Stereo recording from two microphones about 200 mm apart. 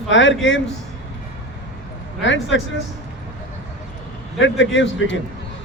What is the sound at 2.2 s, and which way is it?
Speech, 70° left (ahead or behind).